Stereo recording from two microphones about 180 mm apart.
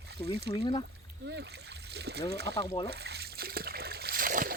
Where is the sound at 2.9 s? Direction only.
65° right (ahead or behind).